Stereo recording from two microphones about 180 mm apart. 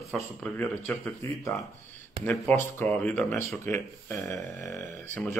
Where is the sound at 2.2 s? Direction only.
10° left (ahead or behind).